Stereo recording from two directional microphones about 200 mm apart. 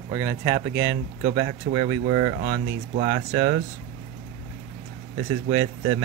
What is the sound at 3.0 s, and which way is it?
Speech, 15° right (ahead or behind).